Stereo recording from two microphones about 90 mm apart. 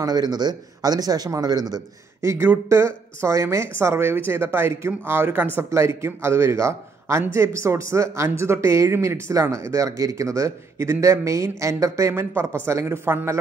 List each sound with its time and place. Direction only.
0.0 s speech: 50° right (ahead or behind)
2.2 s speech: 25° right (ahead or behind)